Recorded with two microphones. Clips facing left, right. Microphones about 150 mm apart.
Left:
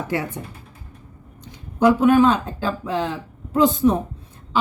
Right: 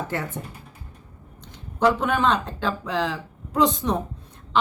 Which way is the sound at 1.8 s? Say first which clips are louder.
Left 6 dB; 5° left (ahead or behind).